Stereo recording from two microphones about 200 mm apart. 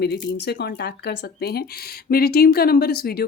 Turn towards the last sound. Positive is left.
turn(degrees=50)  # may be behind; listen again after turning